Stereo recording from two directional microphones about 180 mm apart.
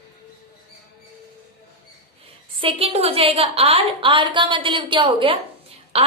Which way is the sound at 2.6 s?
35° right (ahead or behind).